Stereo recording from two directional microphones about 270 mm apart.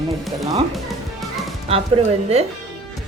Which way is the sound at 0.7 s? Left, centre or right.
Centre.